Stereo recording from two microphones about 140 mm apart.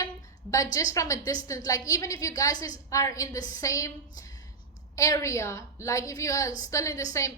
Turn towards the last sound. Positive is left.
turn(degrees=20)  # may be behind; listen again after turning